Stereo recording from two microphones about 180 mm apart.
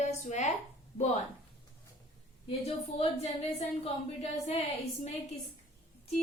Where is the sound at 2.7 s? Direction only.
35° left (ahead or behind).